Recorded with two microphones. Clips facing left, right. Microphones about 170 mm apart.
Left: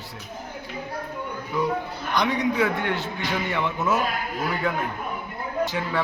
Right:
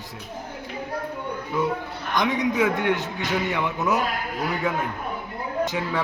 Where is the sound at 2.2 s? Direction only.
20° right (ahead or behind).